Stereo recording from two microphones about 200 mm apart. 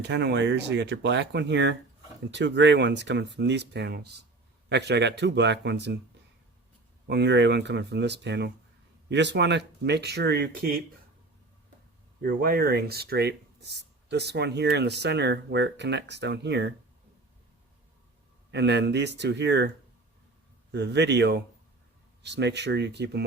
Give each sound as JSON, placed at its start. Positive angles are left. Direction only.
{"t": 0.1, "sound": "speech", "side_deg": -60}
{"t": 7.1, "sound": "speech", "side_deg": -60}
{"t": 12.2, "sound": "speech", "side_deg": -50}
{"t": 18.5, "sound": "speech", "side_deg": -60}
{"t": 20.7, "sound": "speech", "side_deg": -60}